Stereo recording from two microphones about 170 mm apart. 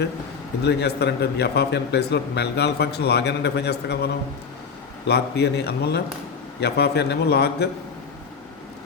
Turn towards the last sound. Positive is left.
turn(degrees=75)  # may be behind; listen again after turning